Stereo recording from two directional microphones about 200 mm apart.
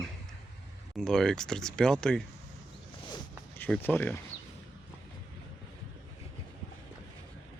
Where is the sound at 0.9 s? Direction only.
Centre (ahead or behind).